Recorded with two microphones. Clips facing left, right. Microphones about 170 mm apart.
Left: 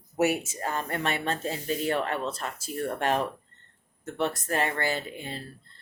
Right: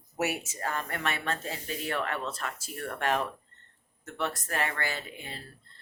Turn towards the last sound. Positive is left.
turn(degrees=30)  # may be behind; listen again after turning